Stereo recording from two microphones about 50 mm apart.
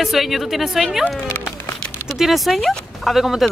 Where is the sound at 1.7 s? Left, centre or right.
Centre.